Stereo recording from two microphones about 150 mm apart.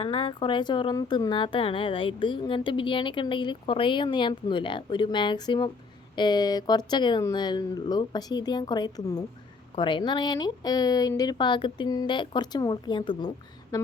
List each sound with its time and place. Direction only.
0.0 s a woman's voice: 40° left (ahead or behind)